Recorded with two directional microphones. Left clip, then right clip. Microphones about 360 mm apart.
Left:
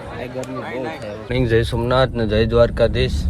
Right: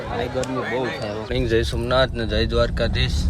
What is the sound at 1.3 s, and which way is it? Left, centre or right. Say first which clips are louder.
Speech: left 4 dB; centre.